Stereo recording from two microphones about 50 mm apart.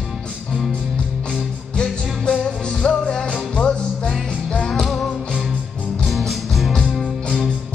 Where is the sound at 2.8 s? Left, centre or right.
Centre.